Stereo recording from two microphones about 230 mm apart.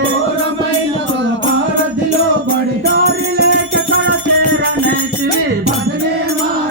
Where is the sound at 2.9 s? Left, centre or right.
Right.